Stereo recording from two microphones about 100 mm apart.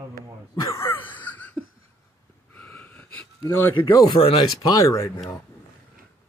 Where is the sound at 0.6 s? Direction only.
35° left (ahead or behind); by 1.6 s 15° left (ahead or behind).